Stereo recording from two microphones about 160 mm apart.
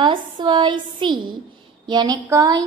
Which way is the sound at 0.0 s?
30° right (ahead or behind).